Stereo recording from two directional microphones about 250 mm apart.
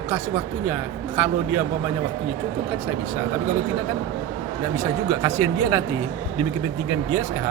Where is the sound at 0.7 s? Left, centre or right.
Centre.